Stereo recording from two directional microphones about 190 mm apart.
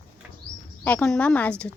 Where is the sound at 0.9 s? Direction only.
5° left (ahead or behind).